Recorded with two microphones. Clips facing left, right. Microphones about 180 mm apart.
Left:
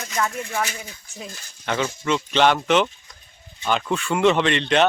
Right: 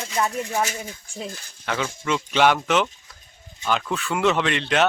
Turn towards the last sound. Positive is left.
turn(degrees=-5)  # may be behind; listen again after turning